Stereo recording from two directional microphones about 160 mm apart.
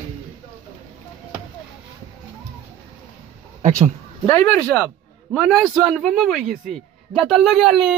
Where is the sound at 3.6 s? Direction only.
50° right (ahead or behind).